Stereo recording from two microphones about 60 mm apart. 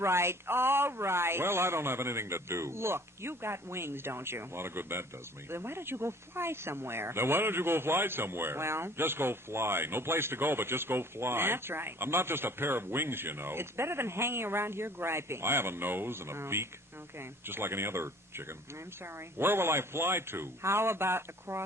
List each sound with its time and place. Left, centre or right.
0.0 s speech: right